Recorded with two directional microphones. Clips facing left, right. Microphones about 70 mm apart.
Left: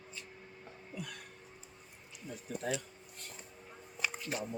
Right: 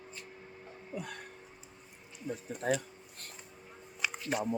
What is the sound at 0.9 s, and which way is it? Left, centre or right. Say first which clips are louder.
Music: right 4 dB; right.